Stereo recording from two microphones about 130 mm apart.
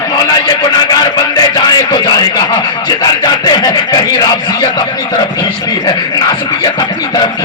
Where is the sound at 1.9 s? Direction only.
35° left (ahead or behind).